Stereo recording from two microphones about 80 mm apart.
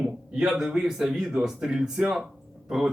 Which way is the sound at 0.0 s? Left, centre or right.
Centre.